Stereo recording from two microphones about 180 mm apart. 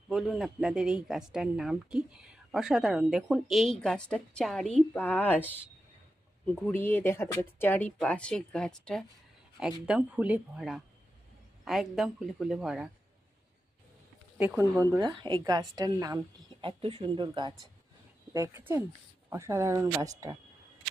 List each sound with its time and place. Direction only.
0.1 s speech: centre (ahead or behind)
14.3 s speech: 10° right (ahead or behind)
15.2 s a woman's voice: 25° right (ahead or behind)
18.3 s speech: 15° right (ahead or behind)